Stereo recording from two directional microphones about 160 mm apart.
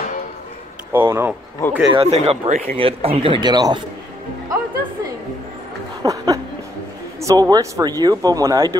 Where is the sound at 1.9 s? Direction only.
40° right (ahead or behind); by 3.8 s 25° right (ahead or behind).